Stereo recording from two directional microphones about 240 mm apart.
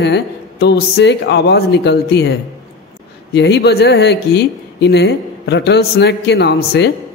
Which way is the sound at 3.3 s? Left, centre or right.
Left.